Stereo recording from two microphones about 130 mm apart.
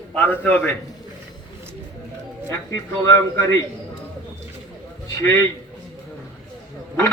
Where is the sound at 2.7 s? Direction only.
25° left (ahead or behind).